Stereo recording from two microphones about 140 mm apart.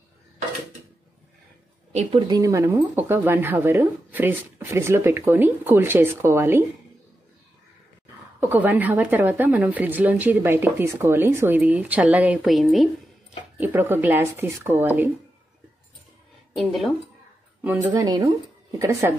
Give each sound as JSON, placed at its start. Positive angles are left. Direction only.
{"t": 1.9, "sound": "a woman's voice", "side_deg": -45}
{"t": 2.2, "sound": "a woman's voice", "side_deg": -25}
{"t": 8.4, "sound": "a woman's voice", "side_deg": -15}
{"t": 13.6, "sound": "a woman's voice", "side_deg": -15}
{"t": 16.5, "sound": "speech", "side_deg": 0}
{"t": 17.9, "sound": "speech", "side_deg": -25}